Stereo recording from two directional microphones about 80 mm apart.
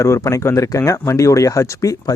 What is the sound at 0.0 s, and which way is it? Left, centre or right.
Speech, left.